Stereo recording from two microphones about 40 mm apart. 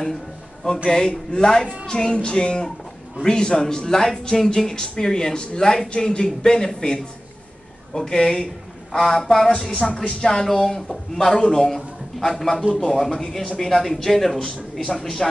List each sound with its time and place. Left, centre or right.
0.8 s speech: centre
9.7 s speech: left
10.2 s speech: centre